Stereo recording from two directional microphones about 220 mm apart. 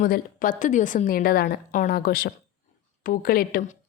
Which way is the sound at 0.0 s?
35° left (ahead or behind).